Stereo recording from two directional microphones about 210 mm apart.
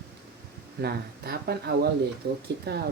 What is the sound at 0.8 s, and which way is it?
Speech, 50° right (ahead or behind).